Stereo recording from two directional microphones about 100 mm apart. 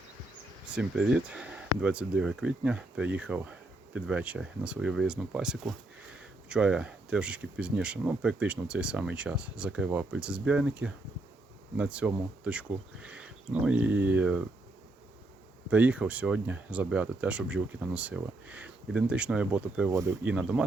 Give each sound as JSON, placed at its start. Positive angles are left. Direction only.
{"t": 0.8, "sound": "speech", "side_deg": -10}
{"t": 15.7, "sound": "speech", "side_deg": -15}
{"t": 19.9, "sound": "speech", "side_deg": -30}
{"t": 20.2, "sound": "speech", "side_deg": -10}